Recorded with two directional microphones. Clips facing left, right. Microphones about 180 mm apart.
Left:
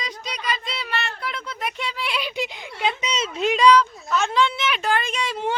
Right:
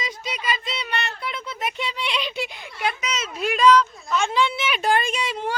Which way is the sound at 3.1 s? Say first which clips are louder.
Left 3 dB; 30° left (ahead or behind).